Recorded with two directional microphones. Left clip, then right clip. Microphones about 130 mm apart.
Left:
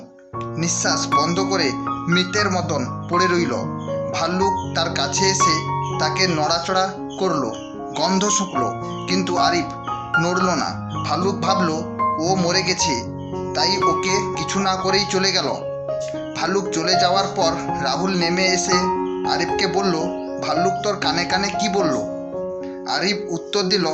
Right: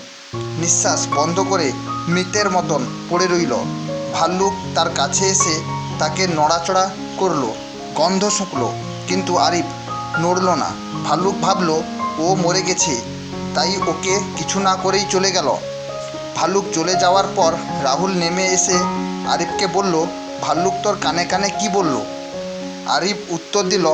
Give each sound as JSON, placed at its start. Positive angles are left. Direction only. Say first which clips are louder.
{"t": 0.6, "sound": "speech", "louder": "right 3 dB", "side_deg": -35}
{"t": 10.4, "sound": "speech", "louder": "right 3 dB", "side_deg": -20}
{"t": 11.0, "sound": "speech", "louder": "right 4 dB", "side_deg": -35}
{"t": 22.9, "sound": "speech", "louder": "right 3 dB", "side_deg": -35}